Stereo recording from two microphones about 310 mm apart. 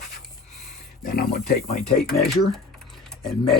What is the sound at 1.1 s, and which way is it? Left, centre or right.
Speech, left.